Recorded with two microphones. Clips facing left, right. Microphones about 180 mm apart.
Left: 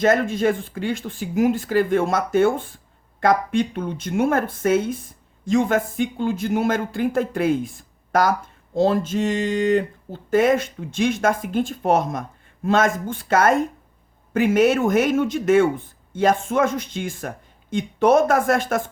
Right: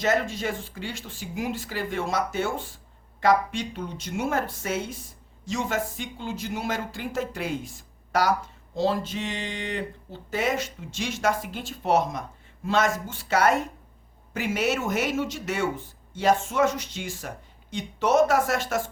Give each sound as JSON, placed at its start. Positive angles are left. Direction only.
{"t": 0.0, "sound": "speech", "side_deg": 50}